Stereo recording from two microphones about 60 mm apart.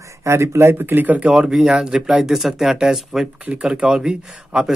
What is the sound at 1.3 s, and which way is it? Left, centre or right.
Speech, centre.